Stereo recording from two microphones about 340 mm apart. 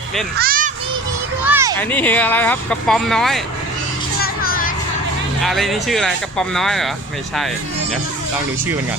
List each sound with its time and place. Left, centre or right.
0.3 s children playing: right
1.5 s a sound: centre
1.8 s speech: centre
4.2 s children playing: left
5.4 s speech: centre